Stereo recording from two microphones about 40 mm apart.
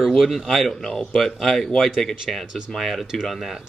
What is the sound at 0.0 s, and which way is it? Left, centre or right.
Speech, centre.